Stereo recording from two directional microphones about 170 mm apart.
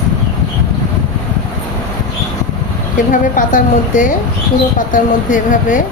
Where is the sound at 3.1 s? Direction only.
50° left (ahead or behind).